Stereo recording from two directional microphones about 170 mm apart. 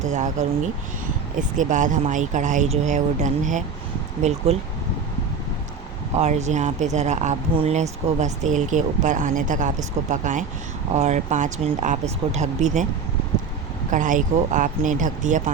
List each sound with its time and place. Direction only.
0.1 s speech: 45° right (ahead or behind)
6.1 s speech: 40° right (ahead or behind)
13.9 s speech: 50° right (ahead or behind)